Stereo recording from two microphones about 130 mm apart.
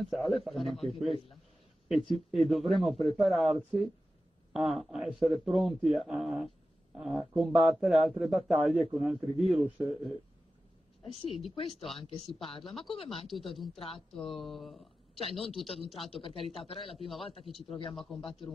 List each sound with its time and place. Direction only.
0.0 s a man's voice: centre (ahead or behind)
11.2 s speech: 45° left (ahead or behind)
12.6 s a man's voice: centre (ahead or behind)
12.9 s speech: 45° left (ahead or behind)
13.3 s a man's voice: centre (ahead or behind)
13.7 s speech: 45° left (ahead or behind)
14.2 s a man's voice: centre (ahead or behind)
16.1 s speech: 45° left (ahead or behind)
17.6 s speech: 40° left (ahead or behind)
17.9 s a man's voice: centre (ahead or behind)